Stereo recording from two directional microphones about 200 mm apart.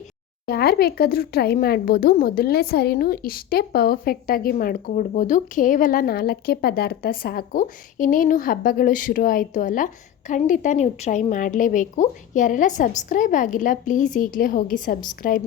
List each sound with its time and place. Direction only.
0.4 s speech: 50° left (ahead or behind)